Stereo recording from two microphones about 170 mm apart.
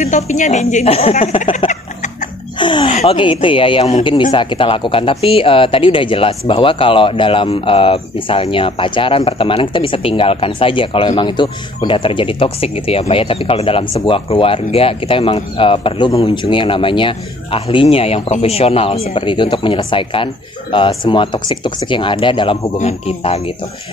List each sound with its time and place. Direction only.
0.0 s speech: 45° left (ahead or behind)
2.6 s a sound: 30° left (ahead or behind)
2.9 s speech: 35° left (ahead or behind)